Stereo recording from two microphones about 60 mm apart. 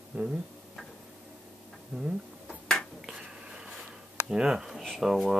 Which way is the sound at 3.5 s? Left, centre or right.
Centre.